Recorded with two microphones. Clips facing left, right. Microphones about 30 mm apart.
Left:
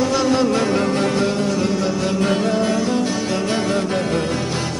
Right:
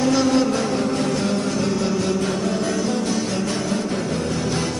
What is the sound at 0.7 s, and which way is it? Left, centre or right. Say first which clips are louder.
Music: left 3 dB; left.